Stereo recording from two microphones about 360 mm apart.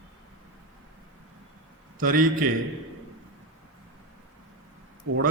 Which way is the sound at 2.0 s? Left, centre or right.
Right.